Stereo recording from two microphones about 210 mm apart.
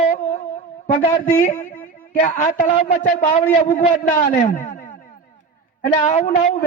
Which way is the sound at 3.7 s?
40° left (ahead or behind).